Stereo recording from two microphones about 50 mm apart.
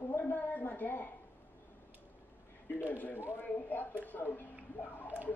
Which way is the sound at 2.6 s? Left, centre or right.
Left.